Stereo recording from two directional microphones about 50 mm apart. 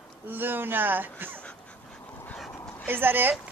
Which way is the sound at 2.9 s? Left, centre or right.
Right.